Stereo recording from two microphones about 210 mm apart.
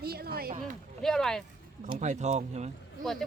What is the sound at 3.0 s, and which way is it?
Speech, centre (ahead or behind).